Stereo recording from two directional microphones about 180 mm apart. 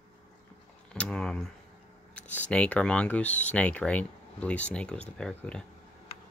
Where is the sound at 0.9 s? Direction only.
5° left (ahead or behind).